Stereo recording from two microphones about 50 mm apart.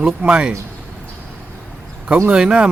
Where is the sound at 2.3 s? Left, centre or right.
Right.